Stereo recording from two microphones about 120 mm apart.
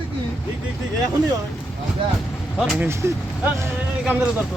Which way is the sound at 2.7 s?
20° right (ahead or behind).